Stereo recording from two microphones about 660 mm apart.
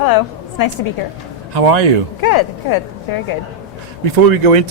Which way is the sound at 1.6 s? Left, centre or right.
Right.